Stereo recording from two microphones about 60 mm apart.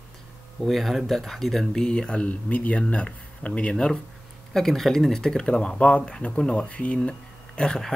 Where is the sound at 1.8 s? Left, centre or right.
Centre.